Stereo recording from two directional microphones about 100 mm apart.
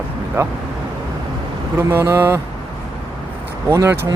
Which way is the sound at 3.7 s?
25° right (ahead or behind).